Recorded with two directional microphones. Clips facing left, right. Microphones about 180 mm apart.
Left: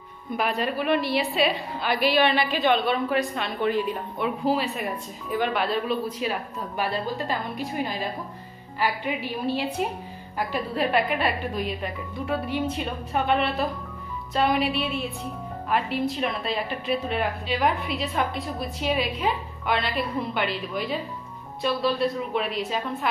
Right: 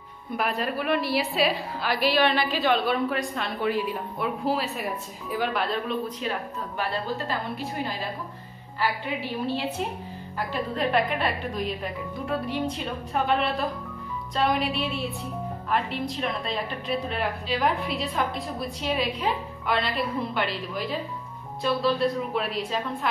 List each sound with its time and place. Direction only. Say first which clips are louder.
0.3 s a woman's voice: left 2 dB; centre (ahead or behind)